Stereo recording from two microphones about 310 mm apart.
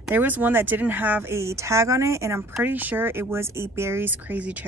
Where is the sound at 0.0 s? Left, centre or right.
Centre.